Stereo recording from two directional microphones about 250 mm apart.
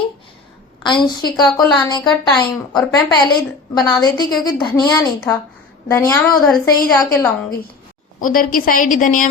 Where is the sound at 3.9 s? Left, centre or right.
Centre.